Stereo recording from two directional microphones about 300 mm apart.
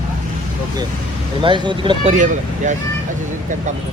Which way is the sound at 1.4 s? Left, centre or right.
Centre.